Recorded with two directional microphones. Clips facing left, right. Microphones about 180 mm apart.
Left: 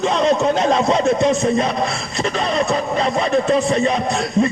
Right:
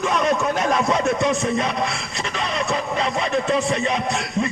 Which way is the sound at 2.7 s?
40° left (ahead or behind).